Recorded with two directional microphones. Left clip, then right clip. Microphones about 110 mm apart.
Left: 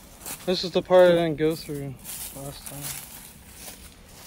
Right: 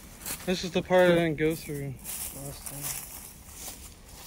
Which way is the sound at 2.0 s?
45° right (ahead or behind).